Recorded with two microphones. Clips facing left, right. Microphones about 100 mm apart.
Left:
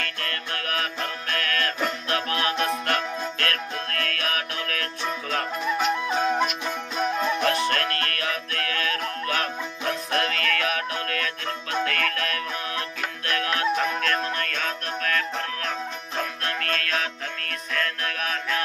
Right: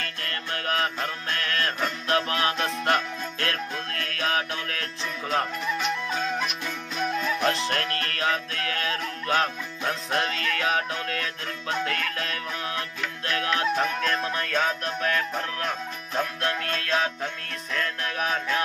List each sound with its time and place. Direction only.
0.0 s music: 30° right (ahead or behind)
6.1 s music: 40° left (ahead or behind)
7.4 s music: 25° right (ahead or behind)
16.5 s music: 20° right (ahead or behind)